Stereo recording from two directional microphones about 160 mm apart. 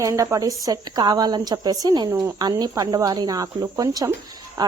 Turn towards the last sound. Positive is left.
turn(degrees=-25)  # may be behind; listen again after turning